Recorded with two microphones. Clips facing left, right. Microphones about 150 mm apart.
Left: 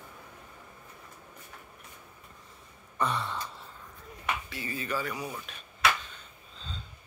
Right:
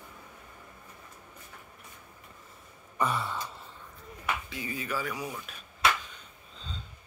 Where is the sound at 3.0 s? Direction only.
5° right (ahead or behind).